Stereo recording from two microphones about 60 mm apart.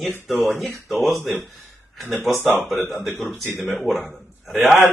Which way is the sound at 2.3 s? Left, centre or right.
Centre.